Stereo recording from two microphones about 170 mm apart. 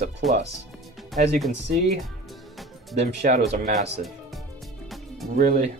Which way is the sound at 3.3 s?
50° right (ahead or behind).